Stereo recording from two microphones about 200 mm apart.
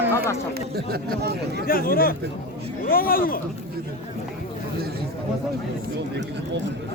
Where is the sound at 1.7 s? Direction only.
45° left (ahead or behind).